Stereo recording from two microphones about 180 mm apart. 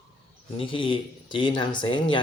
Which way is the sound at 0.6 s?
30° left (ahead or behind).